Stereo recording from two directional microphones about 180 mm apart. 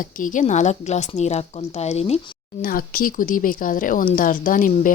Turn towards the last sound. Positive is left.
turn(degrees=50)  # may be behind; listen again after turning